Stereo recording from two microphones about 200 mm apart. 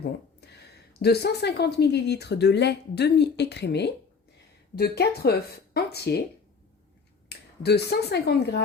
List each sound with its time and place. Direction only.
0.9 s speech: 55° left (ahead or behind)
7.3 s speech: 55° left (ahead or behind)